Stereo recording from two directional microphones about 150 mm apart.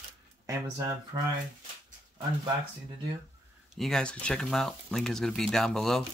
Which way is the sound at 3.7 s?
5° left (ahead or behind).